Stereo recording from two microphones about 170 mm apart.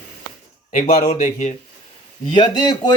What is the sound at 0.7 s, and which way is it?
Speech, 45° left (ahead or behind).